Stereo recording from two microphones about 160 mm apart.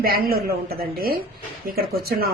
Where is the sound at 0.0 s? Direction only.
70° right (ahead or behind).